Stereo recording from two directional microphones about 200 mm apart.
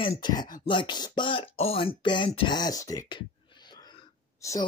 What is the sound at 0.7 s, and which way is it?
Speech, 25° left (ahead or behind).